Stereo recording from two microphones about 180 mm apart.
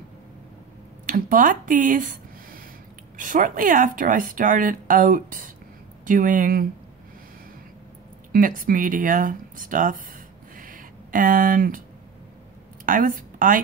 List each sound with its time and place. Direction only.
1.0 s speech: 50° right (ahead or behind)
8.3 s speech: 50° right (ahead or behind)
10.6 s a sound: 50° right (ahead or behind)
12.8 s a woman's voice: 50° right (ahead or behind)